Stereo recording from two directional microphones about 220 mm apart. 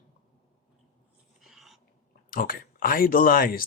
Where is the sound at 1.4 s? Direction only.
Centre (ahead or behind).